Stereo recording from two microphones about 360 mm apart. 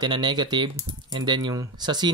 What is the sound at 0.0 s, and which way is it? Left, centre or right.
Speech, centre.